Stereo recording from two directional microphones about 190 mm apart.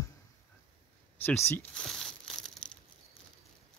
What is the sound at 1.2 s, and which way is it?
Speech, 10° left (ahead or behind).